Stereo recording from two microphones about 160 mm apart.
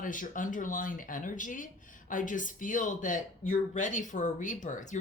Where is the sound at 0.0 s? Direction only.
55° left (ahead or behind).